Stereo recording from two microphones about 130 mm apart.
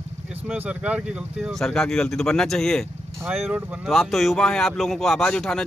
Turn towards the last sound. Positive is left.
turn(degrees=5)  # may be behind; listen again after turning